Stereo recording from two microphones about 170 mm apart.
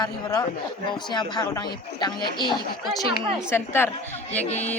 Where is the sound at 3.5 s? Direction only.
15° left (ahead or behind).